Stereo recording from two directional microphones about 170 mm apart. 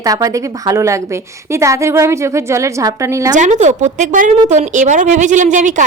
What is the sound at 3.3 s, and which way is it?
A woman's voice, 45° right (ahead or behind).